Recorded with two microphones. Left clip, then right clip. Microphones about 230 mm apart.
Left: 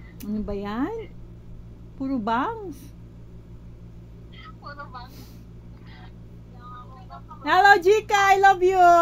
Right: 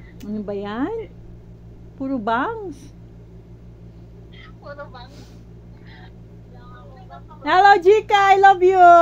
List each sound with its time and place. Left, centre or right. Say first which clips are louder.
0.2 s speech: right 3 dB; left
4.6 s speech: right 3 dB; left
7.1 s speech: right 3 dB; left